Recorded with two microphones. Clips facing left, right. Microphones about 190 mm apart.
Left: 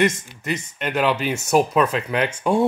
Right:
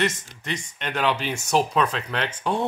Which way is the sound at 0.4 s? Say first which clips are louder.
Left 4 dB; 5° left (ahead or behind).